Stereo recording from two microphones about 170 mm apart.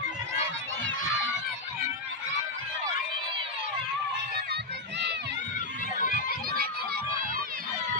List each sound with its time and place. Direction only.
4.5 s run: 90° right
6.0 s run: 50° left (ahead or behind)